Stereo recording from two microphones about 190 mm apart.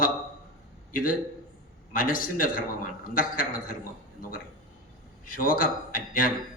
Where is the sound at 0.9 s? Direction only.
45° left (ahead or behind).